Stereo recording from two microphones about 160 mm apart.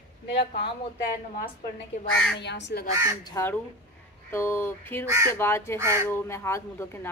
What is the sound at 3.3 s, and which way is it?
Speech, 15° left (ahead or behind).